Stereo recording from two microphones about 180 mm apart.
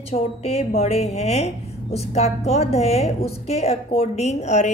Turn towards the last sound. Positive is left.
turn(degrees=40)  # may be behind; listen again after turning